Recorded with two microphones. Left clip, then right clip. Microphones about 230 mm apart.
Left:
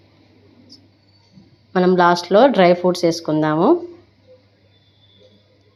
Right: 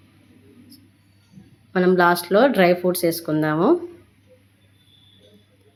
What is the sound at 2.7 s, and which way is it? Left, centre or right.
Speech, centre.